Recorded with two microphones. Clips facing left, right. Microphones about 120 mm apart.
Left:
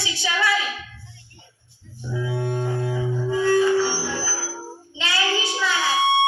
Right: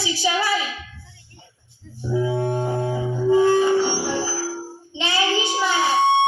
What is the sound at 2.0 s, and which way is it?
Music, 30° right (ahead or behind).